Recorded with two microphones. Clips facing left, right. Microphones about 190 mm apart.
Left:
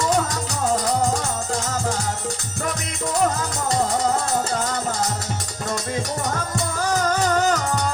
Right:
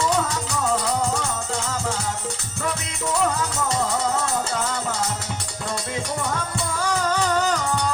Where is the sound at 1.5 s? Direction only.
40° left (ahead or behind).